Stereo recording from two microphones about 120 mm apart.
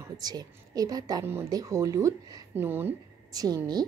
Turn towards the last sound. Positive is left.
turn(degrees=-30)  # may be behind; listen again after turning